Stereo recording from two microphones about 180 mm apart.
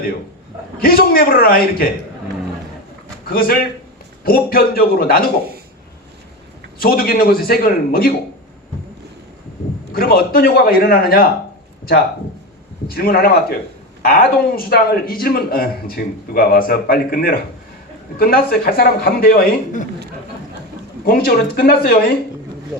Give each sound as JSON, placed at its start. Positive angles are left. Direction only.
{"t": 0.8, "sound": "a man's voice", "side_deg": 55}
{"t": 3.2, "sound": "a man's voice", "side_deg": 55}
{"t": 6.7, "sound": "a man's voice", "side_deg": 55}
{"t": 9.9, "sound": "a man's voice", "side_deg": 55}
{"t": 12.9, "sound": "a man's voice", "side_deg": 55}
{"t": 21.0, "sound": "a man's voice", "side_deg": 55}